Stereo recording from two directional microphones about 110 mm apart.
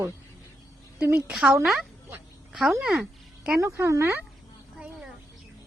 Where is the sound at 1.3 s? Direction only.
5° right (ahead or behind).